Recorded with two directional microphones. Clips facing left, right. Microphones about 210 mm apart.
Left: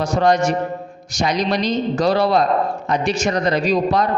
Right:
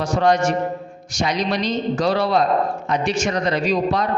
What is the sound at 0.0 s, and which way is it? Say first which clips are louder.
Mantra: left 1 dB; 40° left (ahead or behind).